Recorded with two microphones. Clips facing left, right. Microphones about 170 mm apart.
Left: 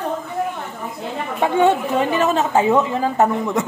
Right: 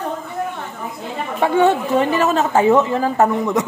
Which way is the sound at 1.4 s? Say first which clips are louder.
Right 1 dB; 20° left (ahead or behind).